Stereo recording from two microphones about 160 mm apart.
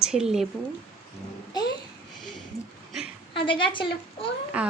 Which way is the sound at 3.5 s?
30° left (ahead or behind).